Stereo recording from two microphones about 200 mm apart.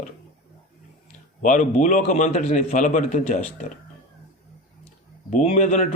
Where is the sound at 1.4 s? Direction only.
40° left (ahead or behind).